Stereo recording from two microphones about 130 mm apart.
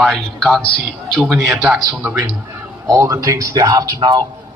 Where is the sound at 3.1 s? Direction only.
25° right (ahead or behind).